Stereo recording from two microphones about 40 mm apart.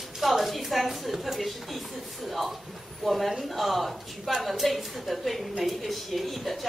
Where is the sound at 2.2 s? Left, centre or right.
Centre.